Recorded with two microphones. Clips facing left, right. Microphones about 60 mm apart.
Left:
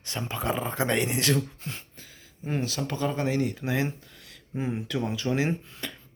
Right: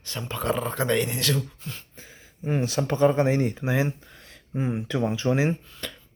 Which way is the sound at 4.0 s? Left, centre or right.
Right.